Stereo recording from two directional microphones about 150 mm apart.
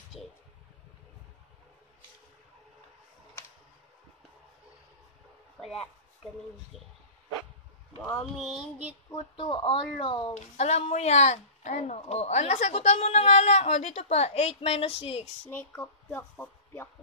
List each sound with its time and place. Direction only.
5.6 s a sound: centre (ahead or behind)
9.1 s speech: 35° left (ahead or behind)
10.3 s speech: 50° left (ahead or behind)
15.4 s speech: 15° left (ahead or behind)